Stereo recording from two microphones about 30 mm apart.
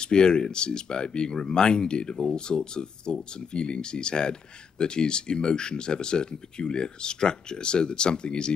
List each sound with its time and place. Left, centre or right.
0.0 s speech: left